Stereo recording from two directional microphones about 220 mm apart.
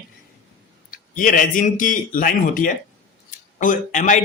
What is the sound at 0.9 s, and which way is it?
A man's voice, 40° left (ahead or behind).